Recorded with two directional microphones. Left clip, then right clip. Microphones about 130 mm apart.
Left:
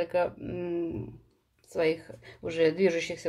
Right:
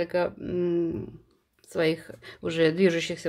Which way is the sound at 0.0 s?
35° right (ahead or behind).